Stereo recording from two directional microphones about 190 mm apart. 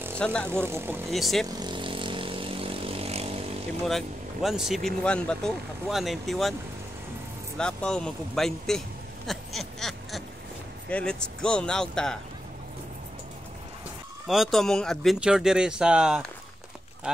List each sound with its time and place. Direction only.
0.2 s speech: 5° left (ahead or behind)
0.5 s speech: 15° right (ahead or behind)
1.1 s speech: centre (ahead or behind)
1.5 s vehicle: 25° right (ahead or behind)
3.8 s speech: centre (ahead or behind)
7.5 s speech: 5° left (ahead or behind)
9.3 s a sound: centre (ahead or behind)
10.9 s speech: 5° left (ahead or behind)
14.2 s speech: centre (ahead or behind)